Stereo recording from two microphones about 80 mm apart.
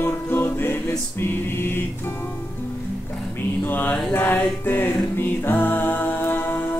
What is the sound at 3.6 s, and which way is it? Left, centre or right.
Music, left.